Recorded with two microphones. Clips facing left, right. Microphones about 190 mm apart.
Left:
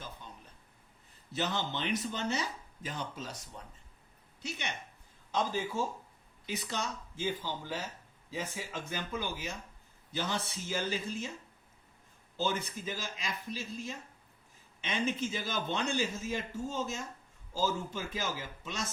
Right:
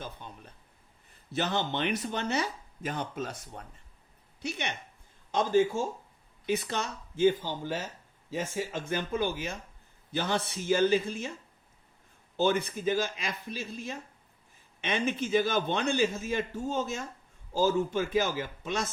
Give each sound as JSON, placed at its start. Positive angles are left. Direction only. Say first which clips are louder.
{"t": 0.2, "sound": "a sound", "louder": "right 4 dB", "side_deg": -60}
{"t": 1.3, "sound": "speech", "louder": "right 4 dB", "side_deg": -55}
{"t": 12.4, "sound": "speech", "louder": "right 7 dB", "side_deg": -65}